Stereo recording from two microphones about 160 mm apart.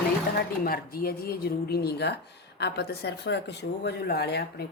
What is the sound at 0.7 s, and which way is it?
Speech, 65° left (ahead or behind).